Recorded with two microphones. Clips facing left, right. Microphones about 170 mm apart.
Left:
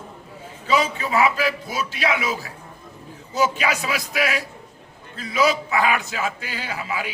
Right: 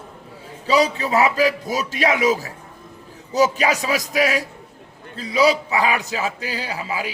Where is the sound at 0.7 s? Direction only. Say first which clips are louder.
Right 3 dB; 35° right (ahead or behind).